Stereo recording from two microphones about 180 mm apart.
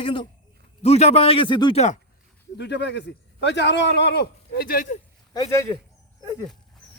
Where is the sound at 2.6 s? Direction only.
70° left (ahead or behind); by 5.0 s 50° left (ahead or behind).